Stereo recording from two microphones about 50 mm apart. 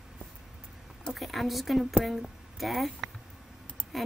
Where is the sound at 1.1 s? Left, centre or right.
Centre.